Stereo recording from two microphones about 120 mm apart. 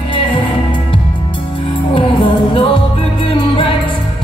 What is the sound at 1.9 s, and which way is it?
Music, 45° left (ahead or behind).